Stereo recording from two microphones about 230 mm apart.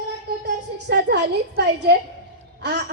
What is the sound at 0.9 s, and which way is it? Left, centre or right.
A woman's voice, right.